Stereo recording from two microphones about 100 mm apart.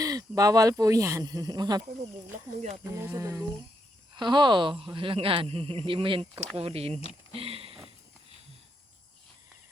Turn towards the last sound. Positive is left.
turn(degrees=-70)  # may be behind; listen again after turning